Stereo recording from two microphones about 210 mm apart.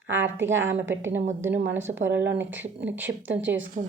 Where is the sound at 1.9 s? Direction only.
45° right (ahead or behind).